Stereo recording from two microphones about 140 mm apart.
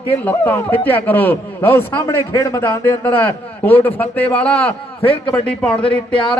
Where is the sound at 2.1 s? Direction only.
25° left (ahead or behind).